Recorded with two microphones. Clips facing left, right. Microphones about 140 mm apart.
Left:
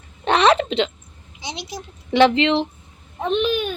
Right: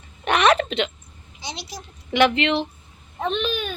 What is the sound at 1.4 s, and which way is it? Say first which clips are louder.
A woman's voice: left 3 dB; 20° left (ahead or behind).